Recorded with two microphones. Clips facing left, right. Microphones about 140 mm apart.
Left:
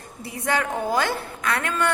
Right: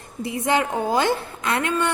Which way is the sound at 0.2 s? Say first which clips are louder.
Right 4 dB; 20° right (ahead or behind).